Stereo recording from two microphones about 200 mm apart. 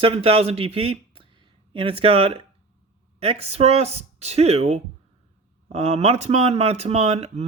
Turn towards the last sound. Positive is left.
turn(degrees=-30)  # may be behind; listen again after turning